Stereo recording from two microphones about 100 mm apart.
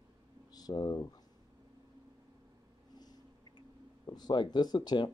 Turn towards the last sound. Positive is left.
turn(degrees=50)  # may be behind; listen again after turning